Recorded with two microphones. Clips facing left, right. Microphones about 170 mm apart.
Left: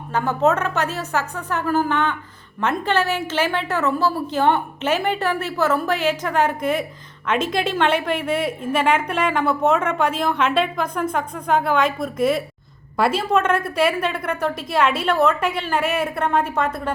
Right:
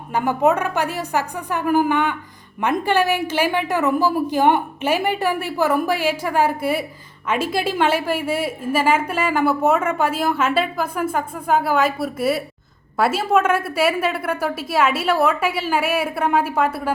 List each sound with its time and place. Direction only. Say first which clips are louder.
0.1 s a woman's voice: right 1 dB; 15° right (ahead or behind)